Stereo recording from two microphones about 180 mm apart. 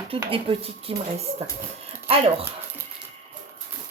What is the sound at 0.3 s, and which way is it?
Speech, 30° right (ahead or behind).